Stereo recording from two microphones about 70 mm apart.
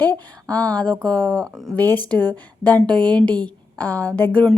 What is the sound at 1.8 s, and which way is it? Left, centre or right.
Speech, left.